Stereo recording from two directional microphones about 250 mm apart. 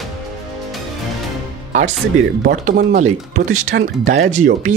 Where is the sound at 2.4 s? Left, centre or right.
Right.